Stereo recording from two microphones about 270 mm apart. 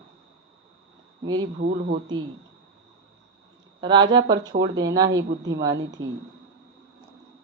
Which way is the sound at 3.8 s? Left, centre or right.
Centre.